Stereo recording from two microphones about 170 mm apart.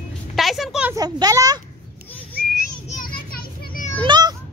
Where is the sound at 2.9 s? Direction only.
55° left (ahead or behind).